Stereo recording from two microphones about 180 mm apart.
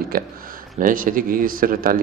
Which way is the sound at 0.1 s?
50° right (ahead or behind).